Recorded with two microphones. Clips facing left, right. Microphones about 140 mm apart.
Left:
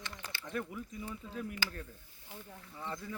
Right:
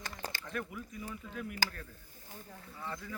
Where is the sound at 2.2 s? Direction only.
40° right (ahead or behind).